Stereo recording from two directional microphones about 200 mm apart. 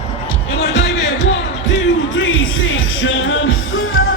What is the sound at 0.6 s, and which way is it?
Music, 60° left (ahead or behind).